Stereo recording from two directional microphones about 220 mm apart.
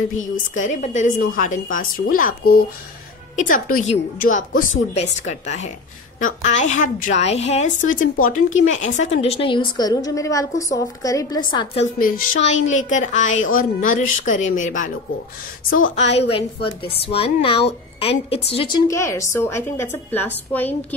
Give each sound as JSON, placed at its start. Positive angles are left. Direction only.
{"t": 0.2, "sound": "a woman's voice", "side_deg": 35}
{"t": 16.0, "sound": "a woman's voice", "side_deg": 30}
{"t": 18.9, "sound": "a woman's voice", "side_deg": 15}